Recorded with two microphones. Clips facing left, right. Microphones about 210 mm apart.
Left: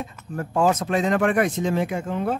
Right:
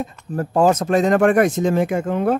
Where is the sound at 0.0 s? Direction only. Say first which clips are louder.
Right 6 dB; 40° right (ahead or behind).